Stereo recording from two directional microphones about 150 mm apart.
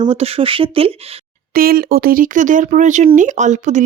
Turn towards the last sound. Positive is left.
turn(degrees=-55)  # may be behind; listen again after turning